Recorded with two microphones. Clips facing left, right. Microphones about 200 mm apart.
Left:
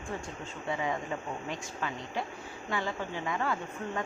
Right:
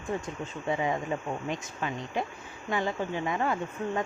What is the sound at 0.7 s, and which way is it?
Speech, 20° right (ahead or behind).